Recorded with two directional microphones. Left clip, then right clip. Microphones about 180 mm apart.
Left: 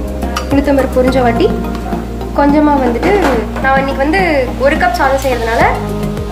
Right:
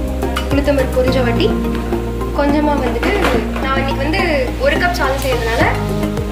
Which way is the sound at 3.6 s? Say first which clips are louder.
Left 6 dB; 40° left (ahead or behind).